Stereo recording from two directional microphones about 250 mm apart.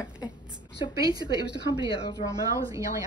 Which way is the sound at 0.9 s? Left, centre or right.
Centre.